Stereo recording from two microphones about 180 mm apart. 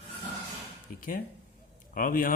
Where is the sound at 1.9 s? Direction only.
50° left (ahead or behind).